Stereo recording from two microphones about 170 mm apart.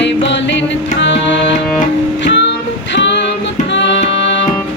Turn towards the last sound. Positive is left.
turn(degrees=90)